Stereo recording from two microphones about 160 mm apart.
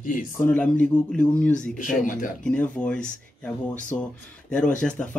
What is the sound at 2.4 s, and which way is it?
Speech, 10° left (ahead or behind).